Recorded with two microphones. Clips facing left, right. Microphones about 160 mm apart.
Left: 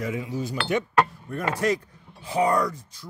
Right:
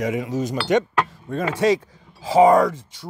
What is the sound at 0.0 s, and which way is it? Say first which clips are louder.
Speech: right 6 dB; 85° right.